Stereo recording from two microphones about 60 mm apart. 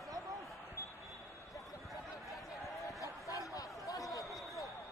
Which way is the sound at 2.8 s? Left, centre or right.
Left.